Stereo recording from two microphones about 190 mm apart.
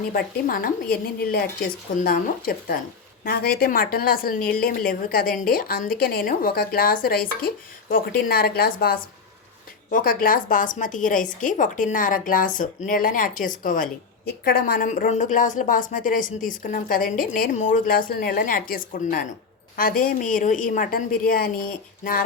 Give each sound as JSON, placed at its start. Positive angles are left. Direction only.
{"t": 0.1, "sound": "a woman's voice", "side_deg": 50}